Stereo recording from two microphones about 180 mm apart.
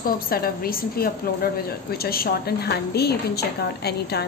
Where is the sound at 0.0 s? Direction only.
55° left (ahead or behind).